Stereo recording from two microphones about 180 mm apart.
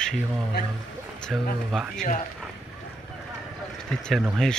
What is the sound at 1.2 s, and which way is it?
Speech, centre (ahead or behind).